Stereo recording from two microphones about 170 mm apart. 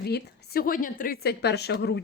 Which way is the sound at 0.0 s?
65° left (ahead or behind).